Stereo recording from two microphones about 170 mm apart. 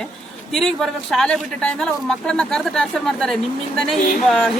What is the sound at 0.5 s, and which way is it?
A man's voice, centre (ahead or behind).